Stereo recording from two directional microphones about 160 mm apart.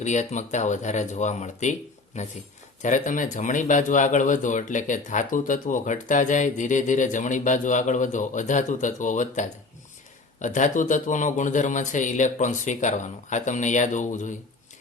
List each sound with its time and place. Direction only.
0.0 s speech: 45° left (ahead or behind)